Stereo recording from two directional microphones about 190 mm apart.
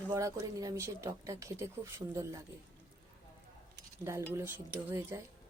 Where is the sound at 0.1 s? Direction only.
15° right (ahead or behind).